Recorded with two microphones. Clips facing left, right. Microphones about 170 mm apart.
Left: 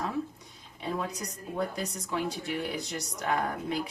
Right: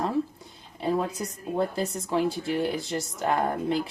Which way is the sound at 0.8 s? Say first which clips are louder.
Right 7 dB; 35° right (ahead or behind).